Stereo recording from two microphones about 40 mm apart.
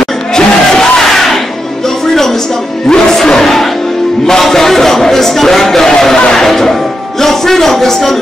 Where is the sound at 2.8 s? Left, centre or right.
Centre.